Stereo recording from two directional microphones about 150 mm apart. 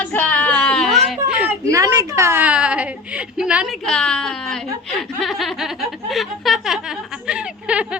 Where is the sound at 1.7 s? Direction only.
25° right (ahead or behind); by 3.7 s 5° right (ahead or behind).